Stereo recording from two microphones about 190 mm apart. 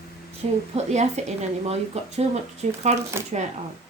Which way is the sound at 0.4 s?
35° right (ahead or behind).